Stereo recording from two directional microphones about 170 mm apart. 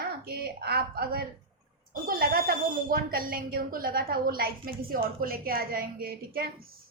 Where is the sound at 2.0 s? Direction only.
60° right (ahead or behind).